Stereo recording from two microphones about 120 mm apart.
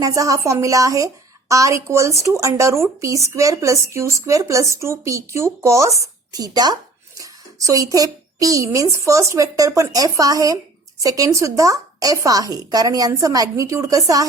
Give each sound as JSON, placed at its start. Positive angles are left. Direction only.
{"t": 0.0, "sound": "a woman's voice", "side_deg": -25}